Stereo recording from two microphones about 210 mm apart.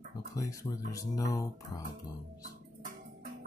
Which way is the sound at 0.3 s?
15° left (ahead or behind).